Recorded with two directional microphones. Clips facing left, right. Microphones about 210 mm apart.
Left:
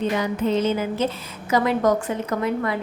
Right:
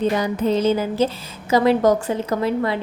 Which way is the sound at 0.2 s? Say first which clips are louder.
Right 2 dB; 35° right (ahead or behind).